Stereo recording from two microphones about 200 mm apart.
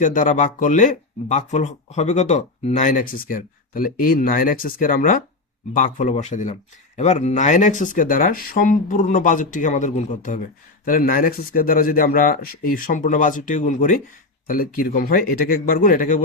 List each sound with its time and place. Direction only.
0.0 s speech: 40° left (ahead or behind)